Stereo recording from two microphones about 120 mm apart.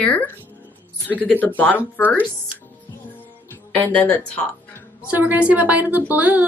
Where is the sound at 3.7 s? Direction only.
15° left (ahead or behind).